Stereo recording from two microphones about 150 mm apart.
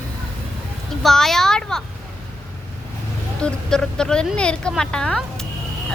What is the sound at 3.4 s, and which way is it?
Speech, 5° left (ahead or behind).